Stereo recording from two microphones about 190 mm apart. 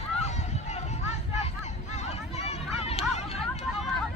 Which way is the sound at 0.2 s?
35° left (ahead or behind).